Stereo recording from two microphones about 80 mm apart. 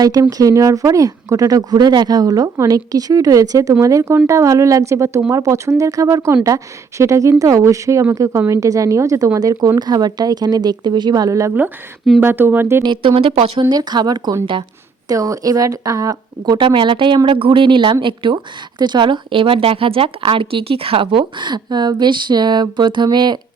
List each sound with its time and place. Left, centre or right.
0.0 s speech: right
12.2 s speech: right
12.8 s a woman's voice: right
15.0 s speech: right
16.6 s speech: right
18.8 s a woman's voice: right